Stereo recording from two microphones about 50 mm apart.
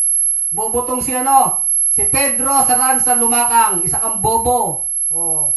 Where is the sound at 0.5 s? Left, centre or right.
Centre.